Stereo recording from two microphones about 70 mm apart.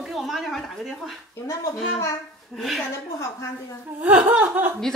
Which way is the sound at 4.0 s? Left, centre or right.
Centre.